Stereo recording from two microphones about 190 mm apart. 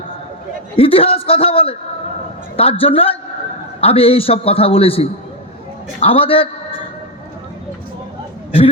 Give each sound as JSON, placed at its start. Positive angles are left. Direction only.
{"t": 0.8, "sound": "a man's voice", "side_deg": 30}